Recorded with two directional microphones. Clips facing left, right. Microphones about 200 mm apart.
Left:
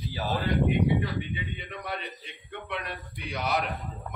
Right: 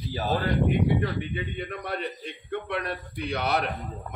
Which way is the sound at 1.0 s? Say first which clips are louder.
Right 3 dB; 50° right (ahead or behind).